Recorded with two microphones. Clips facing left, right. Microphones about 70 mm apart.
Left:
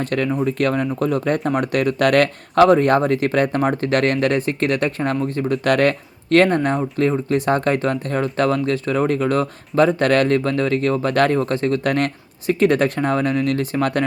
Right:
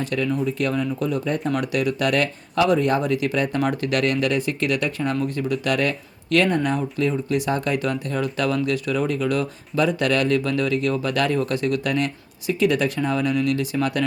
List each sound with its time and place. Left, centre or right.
0.0 s speech: left